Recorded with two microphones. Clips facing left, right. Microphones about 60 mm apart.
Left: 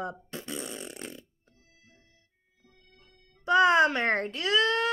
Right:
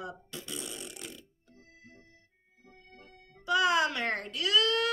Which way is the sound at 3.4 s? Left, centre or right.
Left.